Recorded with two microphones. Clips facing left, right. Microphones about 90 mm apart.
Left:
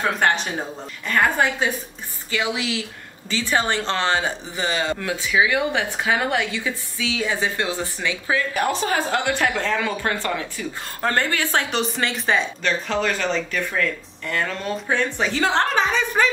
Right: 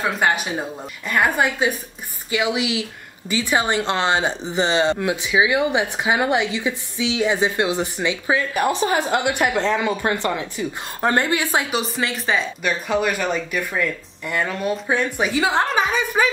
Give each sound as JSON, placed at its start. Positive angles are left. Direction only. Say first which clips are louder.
{"t": 0.0, "sound": "speech", "louder": "even", "side_deg": -5}
{"t": 12.6, "sound": "speech", "louder": "right 4 dB", "side_deg": -10}